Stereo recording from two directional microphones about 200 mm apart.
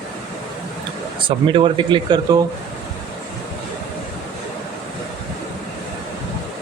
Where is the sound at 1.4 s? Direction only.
25° right (ahead or behind).